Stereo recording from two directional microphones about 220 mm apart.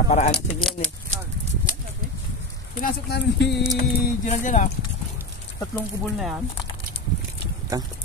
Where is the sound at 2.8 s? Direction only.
45° left (ahead or behind).